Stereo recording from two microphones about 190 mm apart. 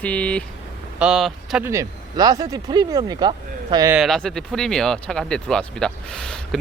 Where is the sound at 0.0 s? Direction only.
5° left (ahead or behind).